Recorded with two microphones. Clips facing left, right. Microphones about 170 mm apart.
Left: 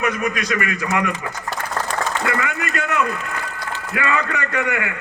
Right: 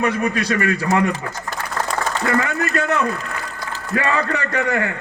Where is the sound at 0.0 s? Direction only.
30° right (ahead or behind).